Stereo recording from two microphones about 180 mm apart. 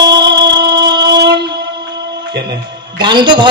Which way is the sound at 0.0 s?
25° right (ahead or behind).